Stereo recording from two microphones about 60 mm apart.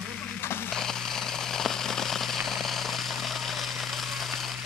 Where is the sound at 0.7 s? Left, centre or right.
Centre.